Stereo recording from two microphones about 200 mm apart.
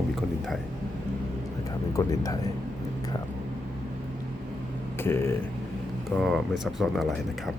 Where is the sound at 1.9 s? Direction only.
15° left (ahead or behind).